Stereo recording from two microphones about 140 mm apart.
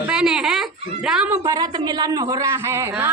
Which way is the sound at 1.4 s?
30° right (ahead or behind).